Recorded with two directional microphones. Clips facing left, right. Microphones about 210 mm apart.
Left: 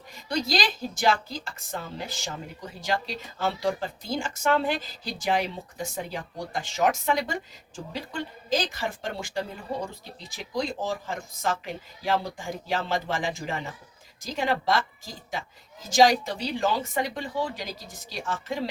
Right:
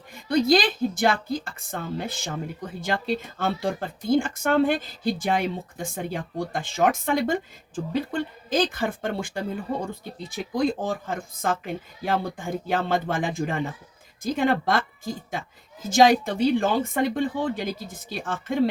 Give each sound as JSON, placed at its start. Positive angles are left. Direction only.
{"t": 0.1, "sound": "speech", "side_deg": -55}